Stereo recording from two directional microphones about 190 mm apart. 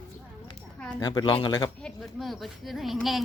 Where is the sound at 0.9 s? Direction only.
20° left (ahead or behind).